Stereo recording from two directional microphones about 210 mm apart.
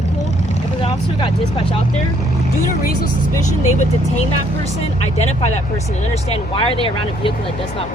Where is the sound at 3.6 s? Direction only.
35° left (ahead or behind).